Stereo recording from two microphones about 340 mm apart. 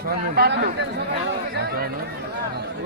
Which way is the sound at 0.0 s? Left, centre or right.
Right.